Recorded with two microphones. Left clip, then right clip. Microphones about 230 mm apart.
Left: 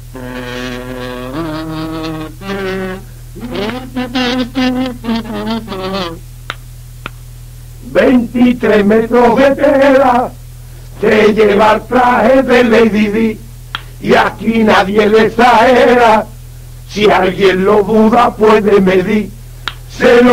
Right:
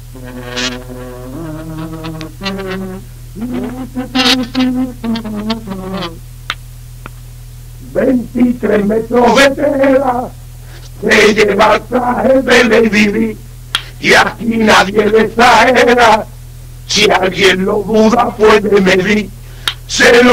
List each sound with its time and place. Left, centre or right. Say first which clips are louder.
0.1 s music: left 1 dB; right
2.6 s a sound: left 4 dB; right
8.5 s chant: left 5 dB; right
16.8 s a man's voice: even; right